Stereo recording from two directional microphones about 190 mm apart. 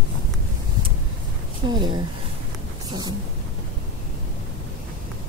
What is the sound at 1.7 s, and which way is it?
Speech, 25° right (ahead or behind).